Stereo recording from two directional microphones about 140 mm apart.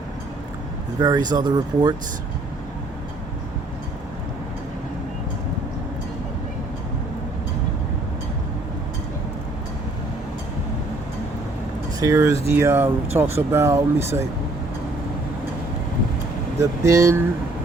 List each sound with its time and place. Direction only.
0.9 s speech: 30° right (ahead or behind)
11.9 s speech: 20° right (ahead or behind)
16.6 s speech: 20° right (ahead or behind)